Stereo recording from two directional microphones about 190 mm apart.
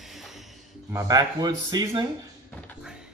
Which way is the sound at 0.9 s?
20° right (ahead or behind).